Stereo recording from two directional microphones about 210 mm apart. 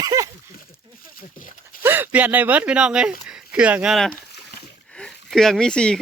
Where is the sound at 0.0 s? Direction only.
15° right (ahead or behind).